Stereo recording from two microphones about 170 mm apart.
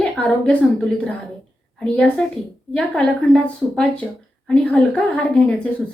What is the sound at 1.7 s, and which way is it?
A woman's voice, 5° left (ahead or behind).